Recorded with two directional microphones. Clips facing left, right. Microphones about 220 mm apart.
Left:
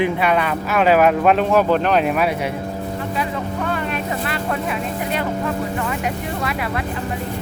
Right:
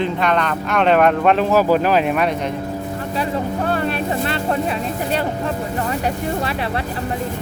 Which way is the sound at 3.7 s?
35° right (ahead or behind).